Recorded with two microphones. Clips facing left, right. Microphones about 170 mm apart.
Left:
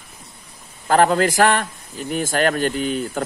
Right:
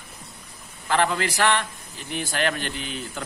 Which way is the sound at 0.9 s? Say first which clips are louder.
Left 7 dB; 45° left (ahead or behind).